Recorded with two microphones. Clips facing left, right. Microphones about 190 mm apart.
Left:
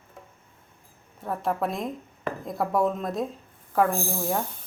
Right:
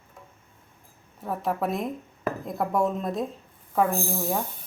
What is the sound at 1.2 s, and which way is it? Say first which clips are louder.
Speech: even; centre (ahead or behind).